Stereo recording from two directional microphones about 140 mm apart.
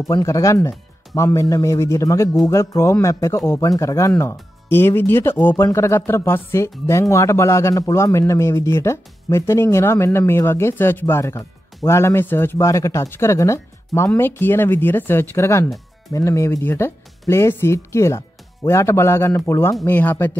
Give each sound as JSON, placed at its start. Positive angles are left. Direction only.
{"t": 0.0, "sound": "speech", "side_deg": 25}